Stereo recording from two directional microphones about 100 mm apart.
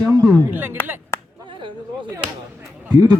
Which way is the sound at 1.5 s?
55° right (ahead or behind).